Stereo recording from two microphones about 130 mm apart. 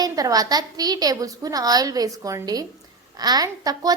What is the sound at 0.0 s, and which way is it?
A woman's voice, 30° right (ahead or behind).